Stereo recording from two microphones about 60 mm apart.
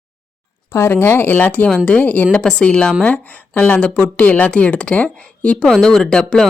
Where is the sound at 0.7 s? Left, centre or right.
Left.